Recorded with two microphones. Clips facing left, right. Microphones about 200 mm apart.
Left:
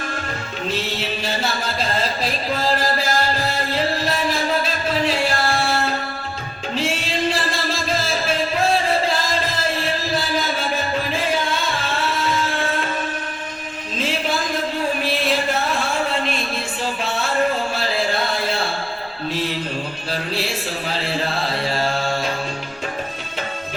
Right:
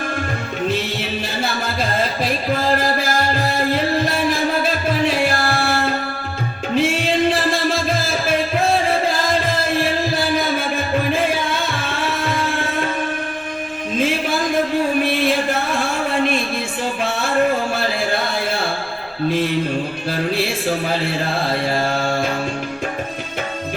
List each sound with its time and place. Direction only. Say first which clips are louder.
4.6 s music: right 3 dB; 55° right (ahead or behind)
6.7 s music: right 6 dB; 55° right (ahead or behind)
20.1 s music: right 4 dB; 55° right (ahead or behind)